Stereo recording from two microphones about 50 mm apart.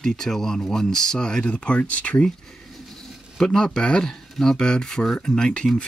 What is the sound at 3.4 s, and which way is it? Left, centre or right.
Speech, centre.